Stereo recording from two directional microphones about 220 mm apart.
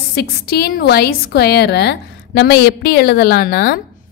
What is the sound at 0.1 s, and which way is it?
A woman's voice, 45° left (ahead or behind).